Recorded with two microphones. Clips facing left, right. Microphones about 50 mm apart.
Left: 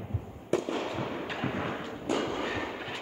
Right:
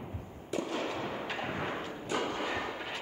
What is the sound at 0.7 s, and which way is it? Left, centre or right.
Thump, centre.